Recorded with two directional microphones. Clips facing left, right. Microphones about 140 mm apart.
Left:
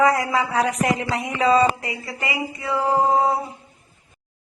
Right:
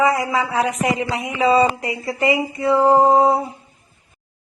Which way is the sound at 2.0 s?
30° right (ahead or behind).